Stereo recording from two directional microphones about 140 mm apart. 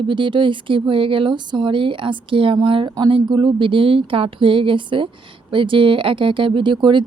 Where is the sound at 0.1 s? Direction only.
35° right (ahead or behind).